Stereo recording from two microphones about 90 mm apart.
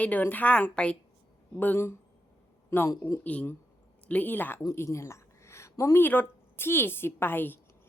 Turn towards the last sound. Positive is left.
turn(degrees=20)  # may be behind; listen again after turning